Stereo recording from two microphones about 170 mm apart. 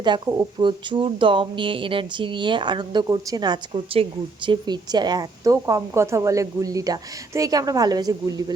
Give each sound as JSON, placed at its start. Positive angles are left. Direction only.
{"t": 0.6, "sound": "speech", "side_deg": -25}